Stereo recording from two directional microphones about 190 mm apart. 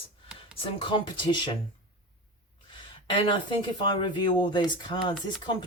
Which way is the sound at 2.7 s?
25° left (ahead or behind).